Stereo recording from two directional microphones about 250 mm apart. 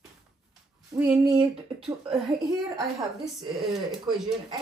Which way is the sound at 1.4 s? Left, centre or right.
Right.